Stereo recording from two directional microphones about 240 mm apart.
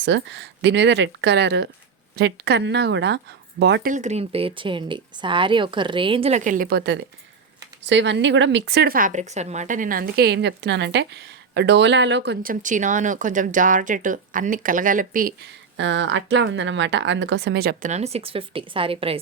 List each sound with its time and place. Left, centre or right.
0.0 s speech: right
3.9 s speech: right
15.8 s speech: right